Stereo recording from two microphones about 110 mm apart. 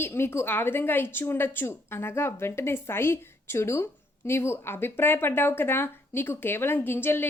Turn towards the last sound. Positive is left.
turn(degrees=20)  # may be behind; listen again after turning